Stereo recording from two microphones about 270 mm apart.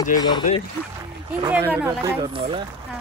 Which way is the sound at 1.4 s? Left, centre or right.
Centre.